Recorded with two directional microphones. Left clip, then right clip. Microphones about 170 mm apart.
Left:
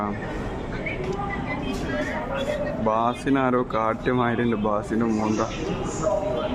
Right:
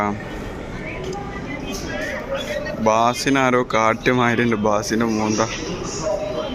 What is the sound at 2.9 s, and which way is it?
Speech, 10° right (ahead or behind).